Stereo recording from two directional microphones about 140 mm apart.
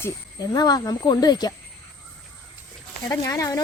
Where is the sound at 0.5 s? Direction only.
30° left (ahead or behind).